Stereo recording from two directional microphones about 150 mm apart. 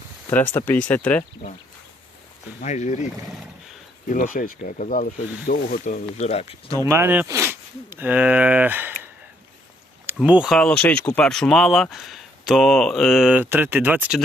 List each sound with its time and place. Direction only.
0.5 s speech: 15° left (ahead or behind)
2.6 s speech: 50° left (ahead or behind)
4.1 s speech: 60° left (ahead or behind); by 6.7 s 40° left (ahead or behind)
6.8 s speech: 15° right (ahead or behind)
10.2 s speech: 5° right (ahead or behind)